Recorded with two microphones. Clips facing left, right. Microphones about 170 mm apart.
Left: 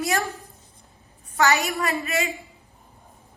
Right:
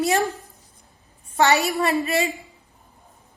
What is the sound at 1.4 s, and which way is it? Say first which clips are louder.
Speech: right 3 dB; 35° right (ahead or behind).